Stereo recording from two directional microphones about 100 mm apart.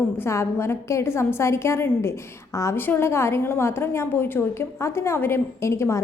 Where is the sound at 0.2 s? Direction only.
25° left (ahead or behind).